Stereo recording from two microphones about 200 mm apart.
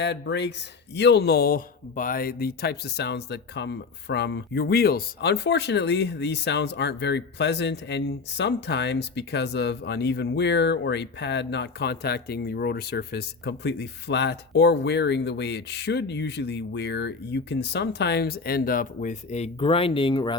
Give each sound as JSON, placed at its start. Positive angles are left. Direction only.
{"t": 0.0, "sound": "speech", "side_deg": 60}